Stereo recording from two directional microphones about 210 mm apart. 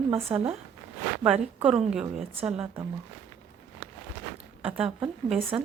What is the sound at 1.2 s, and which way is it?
A woman's voice, 5° right (ahead or behind).